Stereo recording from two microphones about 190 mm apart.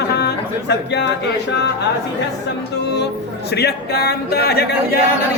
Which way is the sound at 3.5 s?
60° left (ahead or behind).